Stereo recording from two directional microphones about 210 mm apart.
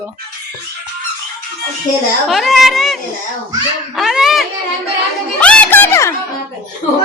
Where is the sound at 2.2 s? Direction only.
Centre (ahead or behind).